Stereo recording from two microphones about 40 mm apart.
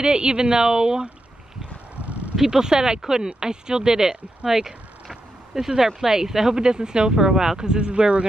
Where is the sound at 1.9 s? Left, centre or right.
Right.